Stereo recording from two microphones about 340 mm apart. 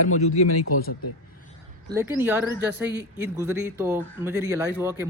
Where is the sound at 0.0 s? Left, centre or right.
Left.